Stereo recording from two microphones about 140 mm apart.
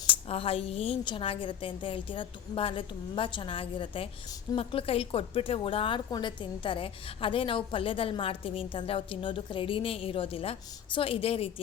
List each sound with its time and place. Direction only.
0.1 s speech: 45° left (ahead or behind)